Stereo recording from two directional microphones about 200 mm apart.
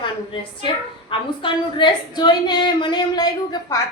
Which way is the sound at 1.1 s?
25° left (ahead or behind).